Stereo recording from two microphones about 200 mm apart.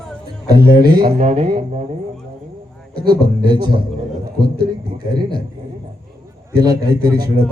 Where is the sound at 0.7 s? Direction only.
20° right (ahead or behind).